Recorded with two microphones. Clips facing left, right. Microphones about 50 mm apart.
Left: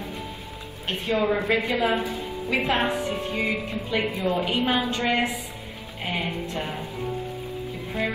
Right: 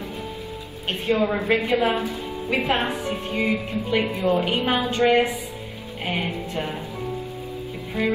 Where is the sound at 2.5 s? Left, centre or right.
Centre.